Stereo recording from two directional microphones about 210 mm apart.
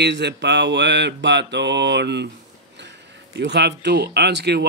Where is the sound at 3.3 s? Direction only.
55° right (ahead or behind).